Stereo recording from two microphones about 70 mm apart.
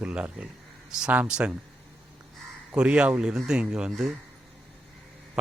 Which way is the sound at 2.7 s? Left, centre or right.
Centre.